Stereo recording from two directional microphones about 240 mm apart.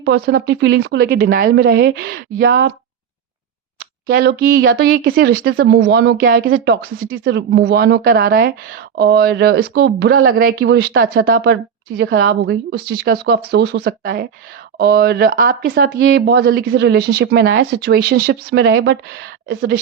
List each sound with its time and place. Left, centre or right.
0.0 s speech: right
3.8 s speech: right